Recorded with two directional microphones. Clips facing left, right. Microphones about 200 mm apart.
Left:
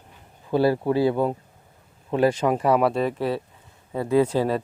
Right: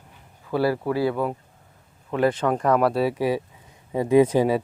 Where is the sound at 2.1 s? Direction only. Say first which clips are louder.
Left 1 dB; 15° left (ahead or behind).